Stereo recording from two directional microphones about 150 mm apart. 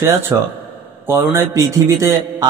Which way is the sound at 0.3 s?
20° right (ahead or behind).